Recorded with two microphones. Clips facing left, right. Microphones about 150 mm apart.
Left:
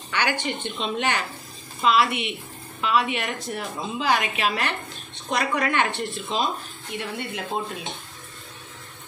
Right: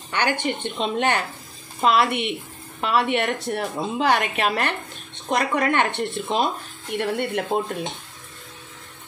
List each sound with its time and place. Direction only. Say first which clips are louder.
0.1 s speech: right 2 dB; 50° right (ahead or behind)